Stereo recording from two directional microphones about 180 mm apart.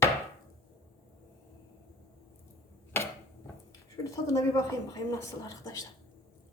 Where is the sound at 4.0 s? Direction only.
20° left (ahead or behind).